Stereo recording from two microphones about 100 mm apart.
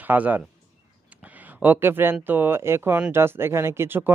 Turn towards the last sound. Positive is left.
turn(degrees=-20)  # may be behind; listen again after turning